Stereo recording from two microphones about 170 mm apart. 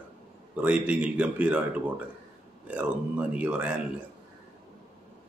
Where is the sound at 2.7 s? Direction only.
10° right (ahead or behind).